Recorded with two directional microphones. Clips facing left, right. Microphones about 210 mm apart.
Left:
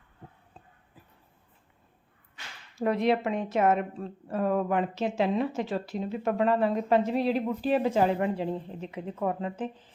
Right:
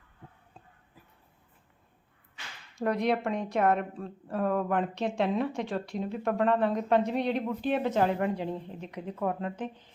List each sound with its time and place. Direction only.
2.7 s a woman's voice: centre (ahead or behind)